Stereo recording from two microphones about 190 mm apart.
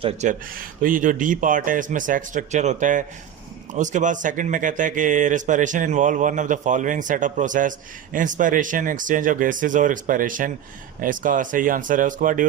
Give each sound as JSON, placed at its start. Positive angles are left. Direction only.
{"t": 0.0, "sound": "a man's voice", "side_deg": -40}